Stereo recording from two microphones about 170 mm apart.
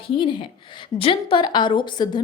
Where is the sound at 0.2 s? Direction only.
30° left (ahead or behind).